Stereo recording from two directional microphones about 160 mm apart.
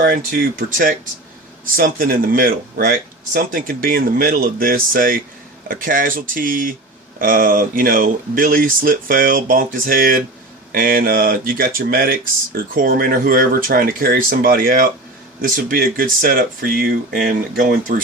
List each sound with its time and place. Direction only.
0.0 s speech: 60° right (ahead or behind)